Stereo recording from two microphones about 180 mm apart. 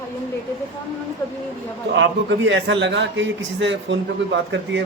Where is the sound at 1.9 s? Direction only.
90° right.